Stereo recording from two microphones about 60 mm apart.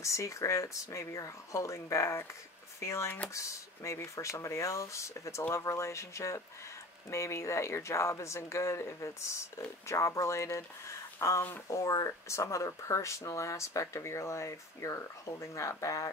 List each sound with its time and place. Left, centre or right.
0.0 s speech: left